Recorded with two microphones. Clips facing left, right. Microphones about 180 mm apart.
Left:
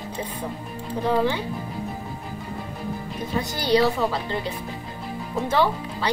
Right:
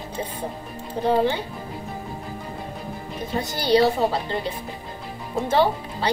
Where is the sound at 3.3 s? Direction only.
25° right (ahead or behind).